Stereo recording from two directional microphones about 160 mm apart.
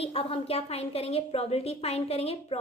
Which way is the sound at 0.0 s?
35° left (ahead or behind).